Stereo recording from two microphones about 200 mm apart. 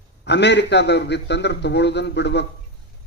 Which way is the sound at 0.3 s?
60° left (ahead or behind).